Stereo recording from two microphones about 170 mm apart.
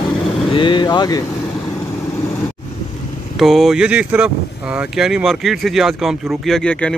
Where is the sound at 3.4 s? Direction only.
Centre (ahead or behind).